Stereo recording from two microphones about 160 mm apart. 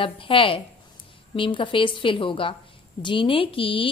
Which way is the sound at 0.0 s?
35° left (ahead or behind).